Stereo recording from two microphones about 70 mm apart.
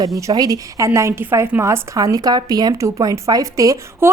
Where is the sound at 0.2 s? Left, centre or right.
Right.